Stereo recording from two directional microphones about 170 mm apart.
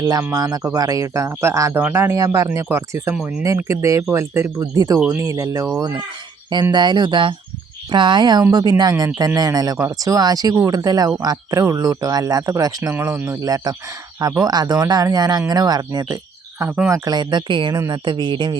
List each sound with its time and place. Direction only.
0.0 s speech: 20° right (ahead or behind)
3.2 s speech: 5° right (ahead or behind)
3.7 s speech: 20° right (ahead or behind)
17.1 s speech: 25° right (ahead or behind)